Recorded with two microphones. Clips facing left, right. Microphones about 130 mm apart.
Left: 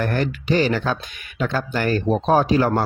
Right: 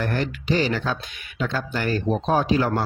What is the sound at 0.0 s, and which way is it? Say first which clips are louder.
Speech: left 3 dB; 50° left (ahead or behind).